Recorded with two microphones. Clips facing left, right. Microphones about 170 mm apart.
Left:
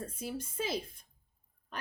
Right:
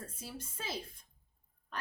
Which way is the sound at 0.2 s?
15° left (ahead or behind).